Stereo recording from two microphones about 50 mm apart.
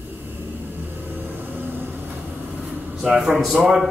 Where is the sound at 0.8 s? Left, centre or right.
Right.